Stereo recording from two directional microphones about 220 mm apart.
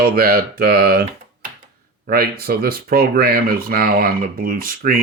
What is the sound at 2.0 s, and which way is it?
Speech, 45° right (ahead or behind).